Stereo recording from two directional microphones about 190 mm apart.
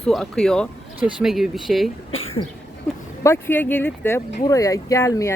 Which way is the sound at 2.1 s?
90° left.